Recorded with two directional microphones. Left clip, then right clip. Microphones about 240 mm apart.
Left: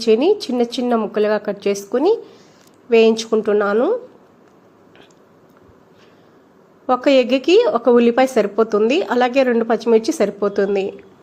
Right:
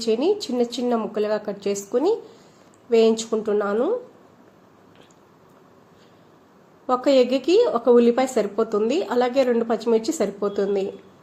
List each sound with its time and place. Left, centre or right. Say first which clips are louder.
0.0 s a woman's voice: left 6 dB; centre
6.8 s a woman's voice: left 4 dB; centre